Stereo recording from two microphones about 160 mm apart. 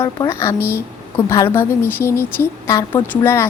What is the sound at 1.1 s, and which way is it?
A woman's voice, 15° left (ahead or behind).